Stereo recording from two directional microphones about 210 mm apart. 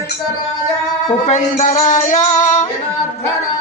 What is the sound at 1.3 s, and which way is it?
Music, 35° left (ahead or behind).